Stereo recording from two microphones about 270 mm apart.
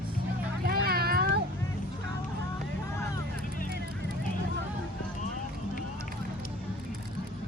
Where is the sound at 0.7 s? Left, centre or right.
Right.